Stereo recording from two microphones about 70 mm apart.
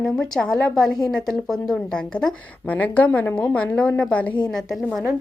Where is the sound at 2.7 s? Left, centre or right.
Left.